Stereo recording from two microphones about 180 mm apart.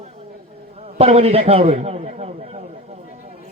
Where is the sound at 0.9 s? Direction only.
35° right (ahead or behind).